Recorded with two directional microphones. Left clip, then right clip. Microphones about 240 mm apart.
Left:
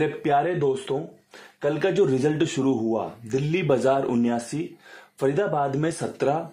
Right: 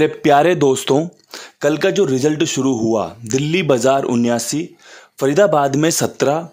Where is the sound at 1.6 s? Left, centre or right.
Right.